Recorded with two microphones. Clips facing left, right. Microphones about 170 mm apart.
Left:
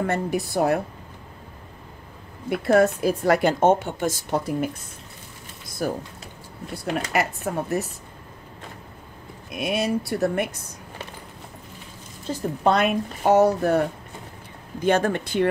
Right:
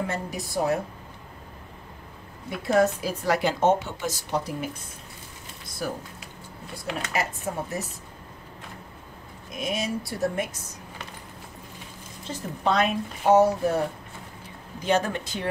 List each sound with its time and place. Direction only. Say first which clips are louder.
0.0 s a woman's voice: left 6 dB; 60° left (ahead or behind)
2.5 s a woman's voice: left 4 dB; 55° left (ahead or behind)
5.8 s a woman's voice: left 5 dB; 45° left (ahead or behind)
7.1 s a woman's voice: left 4 dB; 65° left (ahead or behind)
9.5 s a woman's voice: left 5 dB; 65° left (ahead or behind)
12.3 s a woman's voice: left 5 dB; 55° left (ahead or behind)
14.8 s a woman's voice: left 4 dB; 55° left (ahead or behind)